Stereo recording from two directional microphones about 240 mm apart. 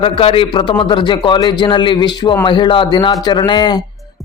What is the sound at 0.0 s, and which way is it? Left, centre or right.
A man's voice, left.